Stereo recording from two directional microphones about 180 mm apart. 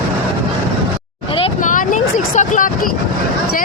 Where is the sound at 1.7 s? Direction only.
45° left (ahead or behind).